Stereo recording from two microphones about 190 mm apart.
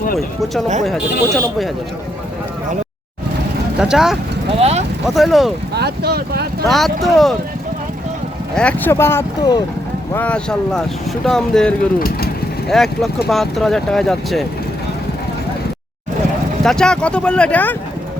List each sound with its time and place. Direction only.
0.9 s speech: centre (ahead or behind)
3.8 s speech: 5° right (ahead or behind)
4.6 s speech: 35° right (ahead or behind)
5.0 s speech: centre (ahead or behind)
5.7 s speech: 60° right (ahead or behind)
6.7 s speech: centre (ahead or behind)
8.5 s speech: 10° left (ahead or behind)
10.1 s speech: 10° left (ahead or behind)
11.9 s speech: 50° left (ahead or behind)
12.6 s speech: centre (ahead or behind)
16.6 s speech: 5° left (ahead or behind)